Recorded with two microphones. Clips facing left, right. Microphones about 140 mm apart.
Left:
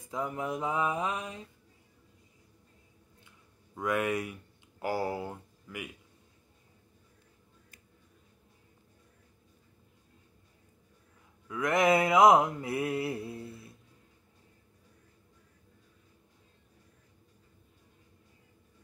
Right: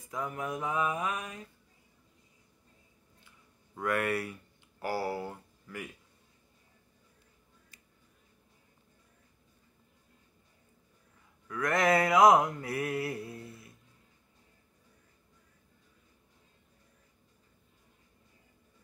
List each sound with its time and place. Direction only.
0.1 s mantra: 25° left (ahead or behind)
3.8 s speech: 15° left (ahead or behind)
11.4 s mantra: 20° left (ahead or behind)